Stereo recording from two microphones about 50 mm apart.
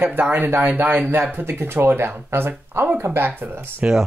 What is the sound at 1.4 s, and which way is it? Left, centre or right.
Speech, right.